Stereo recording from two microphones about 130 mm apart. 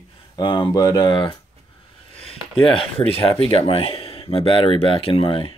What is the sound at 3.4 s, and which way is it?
Speech, 45° left (ahead or behind).